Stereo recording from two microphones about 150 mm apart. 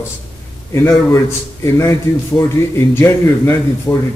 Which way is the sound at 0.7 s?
20° left (ahead or behind).